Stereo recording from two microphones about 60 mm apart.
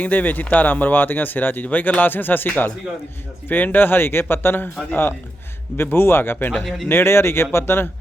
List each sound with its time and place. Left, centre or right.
0.0 s speech: left
5.7 s speech: left
6.8 s speech: left